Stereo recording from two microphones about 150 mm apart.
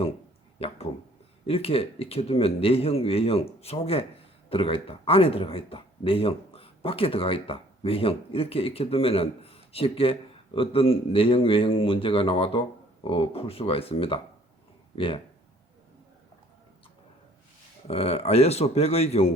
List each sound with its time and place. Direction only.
1.5 s speech: 40° left (ahead or behind)
17.8 s speech: 45° left (ahead or behind)